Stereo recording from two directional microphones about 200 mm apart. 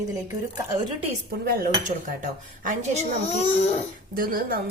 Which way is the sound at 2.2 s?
40° right (ahead or behind).